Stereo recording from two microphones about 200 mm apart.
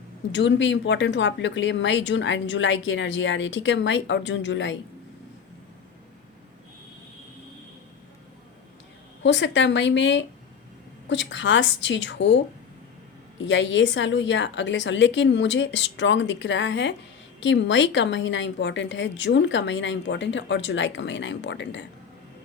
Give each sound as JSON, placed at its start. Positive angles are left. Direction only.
{"t": 0.3, "sound": "a woman's voice", "side_deg": 65}
{"t": 9.2, "sound": "a woman's voice", "side_deg": 65}
{"t": 13.4, "sound": "a woman's voice", "side_deg": 65}